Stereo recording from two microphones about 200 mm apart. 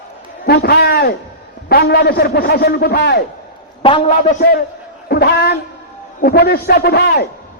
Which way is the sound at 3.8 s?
25° left (ahead or behind).